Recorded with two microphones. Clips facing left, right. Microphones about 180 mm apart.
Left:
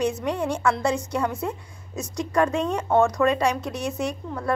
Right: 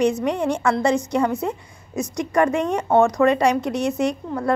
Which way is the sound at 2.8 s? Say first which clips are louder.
Right 3 dB; 20° right (ahead or behind).